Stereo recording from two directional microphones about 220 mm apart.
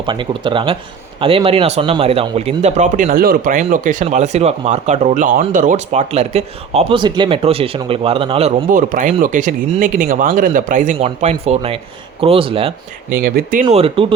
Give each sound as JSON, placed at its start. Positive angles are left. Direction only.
{"t": 0.0, "sound": "a man's voice", "side_deg": -20}
{"t": 13.1, "sound": "a man's voice", "side_deg": -40}